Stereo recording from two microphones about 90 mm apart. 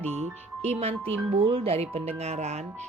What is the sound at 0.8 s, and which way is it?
Speech, 90° right.